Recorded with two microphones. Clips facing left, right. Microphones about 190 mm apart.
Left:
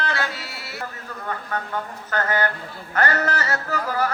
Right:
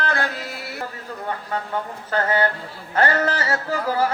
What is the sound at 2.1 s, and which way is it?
Music, 30° right (ahead or behind).